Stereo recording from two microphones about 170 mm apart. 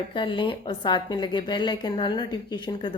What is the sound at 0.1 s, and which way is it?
A woman's voice, 30° left (ahead or behind).